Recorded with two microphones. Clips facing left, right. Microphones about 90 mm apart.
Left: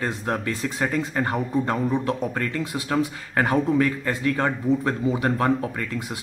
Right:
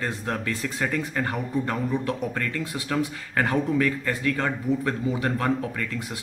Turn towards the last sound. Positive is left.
turn(degrees=20)  # may be behind; listen again after turning